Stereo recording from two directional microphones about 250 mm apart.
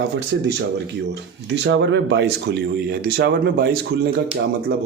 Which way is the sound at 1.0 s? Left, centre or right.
Right.